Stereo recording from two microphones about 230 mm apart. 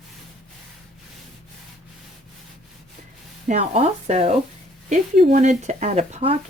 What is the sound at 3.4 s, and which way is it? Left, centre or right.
Speech, right.